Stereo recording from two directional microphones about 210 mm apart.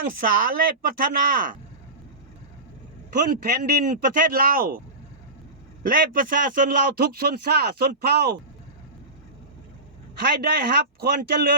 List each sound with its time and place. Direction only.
0.2 s a man's voice: 40° right (ahead or behind)
3.2 s a man's voice: 40° right (ahead or behind)
5.8 s a man's voice: 40° right (ahead or behind)
10.4 s a man's voice: 45° right (ahead or behind)